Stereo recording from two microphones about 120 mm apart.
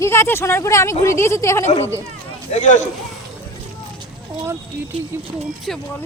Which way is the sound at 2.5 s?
80° left.